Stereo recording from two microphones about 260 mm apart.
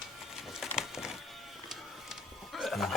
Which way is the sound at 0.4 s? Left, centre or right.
Centre.